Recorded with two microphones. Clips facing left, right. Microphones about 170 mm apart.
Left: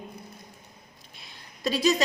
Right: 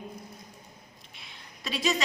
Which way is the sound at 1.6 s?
40° left (ahead or behind).